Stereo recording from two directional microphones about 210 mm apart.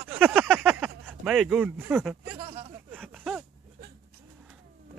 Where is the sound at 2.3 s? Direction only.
30° right (ahead or behind).